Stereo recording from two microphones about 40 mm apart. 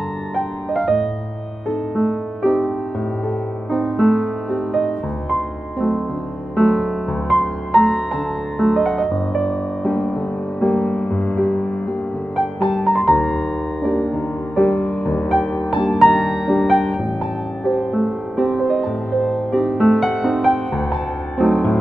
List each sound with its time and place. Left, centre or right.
0.4 s music: centre
2.0 s music: centre
3.7 s music: centre
4.7 s music: centre
5.8 s music: centre
7.7 s music: centre
9.8 s music: centre; by 11.3 s left
11.3 s music: centre
12.6 s music: centre
14.6 s music: centre
17.9 s music: centre
19.7 s music: centre
20.0 s music: centre
21.4 s music: left